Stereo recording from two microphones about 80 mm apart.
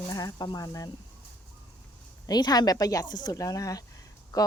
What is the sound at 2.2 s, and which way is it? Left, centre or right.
Speech, left.